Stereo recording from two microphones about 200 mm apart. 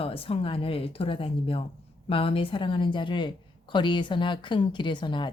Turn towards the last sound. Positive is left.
turn(degrees=25)  # may be behind; listen again after turning